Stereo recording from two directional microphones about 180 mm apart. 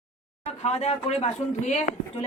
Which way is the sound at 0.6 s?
35° left (ahead or behind).